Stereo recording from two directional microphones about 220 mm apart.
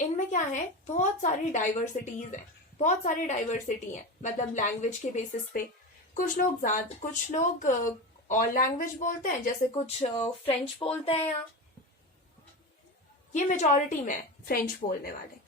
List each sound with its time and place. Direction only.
0.3 s a woman's voice: 35° left (ahead or behind)
13.3 s a woman's voice: 35° left (ahead or behind)